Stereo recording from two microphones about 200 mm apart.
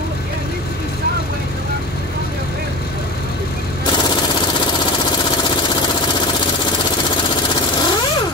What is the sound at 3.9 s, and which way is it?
Vehicle, 25° left (ahead or behind).